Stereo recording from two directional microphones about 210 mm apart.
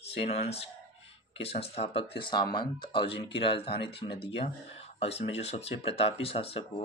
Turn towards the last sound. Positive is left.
turn(degrees=25)  # may be behind; listen again after turning